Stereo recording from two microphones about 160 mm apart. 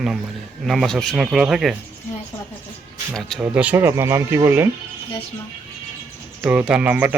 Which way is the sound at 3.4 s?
10° right (ahead or behind).